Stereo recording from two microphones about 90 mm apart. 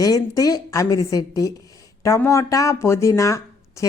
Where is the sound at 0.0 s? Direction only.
45° left (ahead or behind).